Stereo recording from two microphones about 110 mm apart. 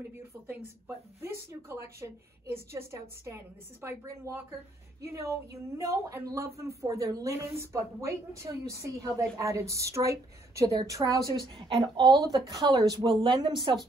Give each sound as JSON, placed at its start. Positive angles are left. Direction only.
{"t": 0.5, "sound": "a woman's voice", "side_deg": -20}